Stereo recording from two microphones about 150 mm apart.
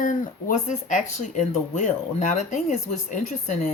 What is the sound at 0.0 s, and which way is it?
Speech, 55° left (ahead or behind).